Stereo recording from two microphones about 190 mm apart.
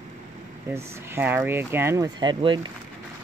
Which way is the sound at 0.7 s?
10° right (ahead or behind).